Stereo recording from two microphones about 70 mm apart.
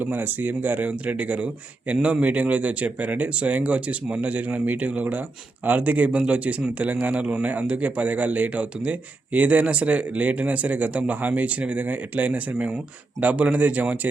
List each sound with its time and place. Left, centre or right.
0.0 s speech: right